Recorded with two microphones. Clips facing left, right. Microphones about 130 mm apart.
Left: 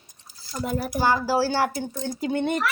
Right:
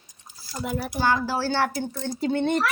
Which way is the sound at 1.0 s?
10° left (ahead or behind).